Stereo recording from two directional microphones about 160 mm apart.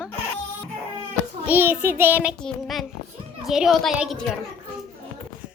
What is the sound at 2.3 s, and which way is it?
A woman's voice, centre (ahead or behind).